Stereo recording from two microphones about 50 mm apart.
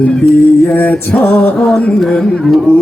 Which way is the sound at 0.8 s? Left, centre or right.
Left.